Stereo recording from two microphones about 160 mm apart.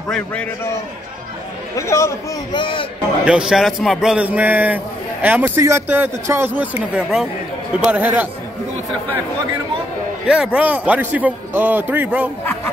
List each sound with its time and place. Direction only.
0.1 s a man's voice: 10° left (ahead or behind)
1.8 s a man's voice: 20° left (ahead or behind)
2.5 s a man's voice: 30° left (ahead or behind)
3.3 s a man's voice: 5° right (ahead or behind)
10.2 s a man's voice: 5° right (ahead or behind)